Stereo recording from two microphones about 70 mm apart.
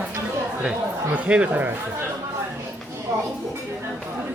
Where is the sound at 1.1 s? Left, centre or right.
Right.